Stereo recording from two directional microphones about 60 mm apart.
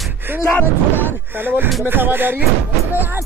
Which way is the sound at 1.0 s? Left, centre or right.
Right.